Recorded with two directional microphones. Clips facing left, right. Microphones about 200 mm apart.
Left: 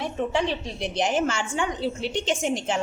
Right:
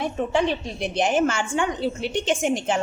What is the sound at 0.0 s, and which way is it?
A woman's voice, 50° right (ahead or behind).